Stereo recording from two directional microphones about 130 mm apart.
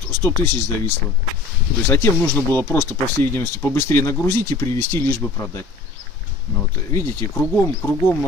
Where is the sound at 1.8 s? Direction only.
15° left (ahead or behind).